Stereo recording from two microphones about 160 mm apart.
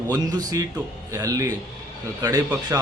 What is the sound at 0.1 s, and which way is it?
Speech, 25° right (ahead or behind).